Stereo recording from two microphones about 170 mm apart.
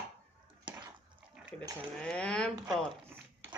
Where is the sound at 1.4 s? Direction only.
5° right (ahead or behind).